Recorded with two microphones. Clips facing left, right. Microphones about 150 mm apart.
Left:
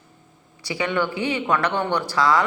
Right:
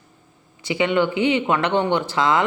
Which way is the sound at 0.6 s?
20° right (ahead or behind).